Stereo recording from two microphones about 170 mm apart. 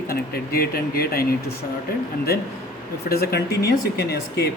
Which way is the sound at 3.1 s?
65° left (ahead or behind).